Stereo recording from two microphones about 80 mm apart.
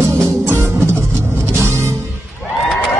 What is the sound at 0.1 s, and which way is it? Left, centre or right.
Music, right.